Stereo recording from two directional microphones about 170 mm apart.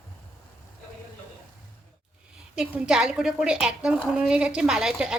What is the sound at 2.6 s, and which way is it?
A woman's voice, 5° right (ahead or behind).